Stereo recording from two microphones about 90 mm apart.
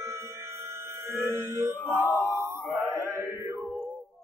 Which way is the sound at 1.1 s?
25° right (ahead or behind).